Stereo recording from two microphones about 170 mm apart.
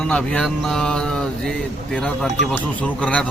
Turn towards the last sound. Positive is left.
turn(degrees=5)  # may be behind; listen again after turning